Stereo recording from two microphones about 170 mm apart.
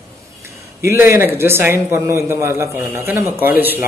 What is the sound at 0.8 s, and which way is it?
A man's voice, 15° right (ahead or behind).